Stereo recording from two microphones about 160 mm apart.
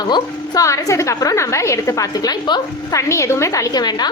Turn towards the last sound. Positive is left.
turn(degrees=25)  # may be behind; listen again after turning